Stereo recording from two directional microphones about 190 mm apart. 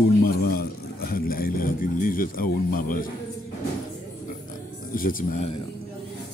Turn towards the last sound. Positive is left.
turn(degrees=45)  # may be behind; listen again after turning